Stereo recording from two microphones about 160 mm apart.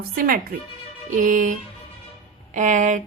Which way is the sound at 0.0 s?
65° right (ahead or behind).